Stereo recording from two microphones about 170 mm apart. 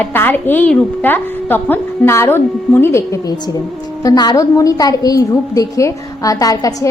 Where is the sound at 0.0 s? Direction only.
10° left (ahead or behind).